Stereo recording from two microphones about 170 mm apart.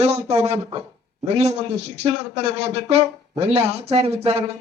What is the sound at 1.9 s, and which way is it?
Speech, 40° right (ahead or behind).